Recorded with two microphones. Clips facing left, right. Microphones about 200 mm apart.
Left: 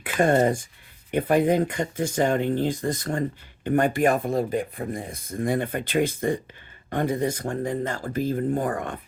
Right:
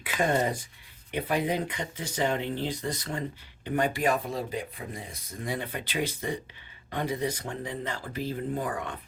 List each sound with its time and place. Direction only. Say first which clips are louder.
0.0 s speech: left 7 dB; 50° left (ahead or behind)